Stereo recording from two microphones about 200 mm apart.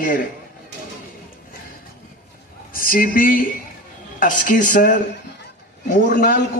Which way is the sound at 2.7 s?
45° left (ahead or behind).